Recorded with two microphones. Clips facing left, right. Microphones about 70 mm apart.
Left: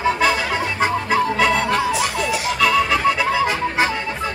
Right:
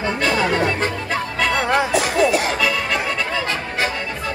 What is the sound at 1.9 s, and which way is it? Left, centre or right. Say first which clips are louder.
Music: right 4 dB; right.